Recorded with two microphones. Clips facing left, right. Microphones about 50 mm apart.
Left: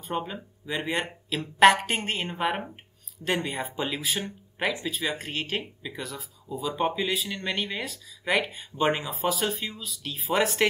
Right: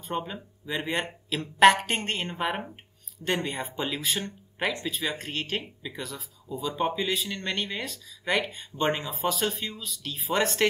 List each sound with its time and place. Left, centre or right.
0.0 s speech: centre